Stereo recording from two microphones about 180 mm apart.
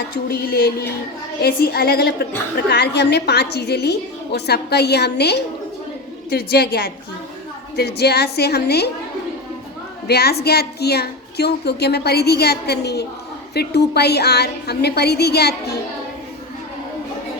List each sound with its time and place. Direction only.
0.3 s speech: 55° left (ahead or behind)
10.1 s speech: 60° left (ahead or behind)